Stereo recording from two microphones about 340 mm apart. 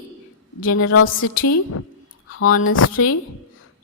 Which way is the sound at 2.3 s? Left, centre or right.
Left.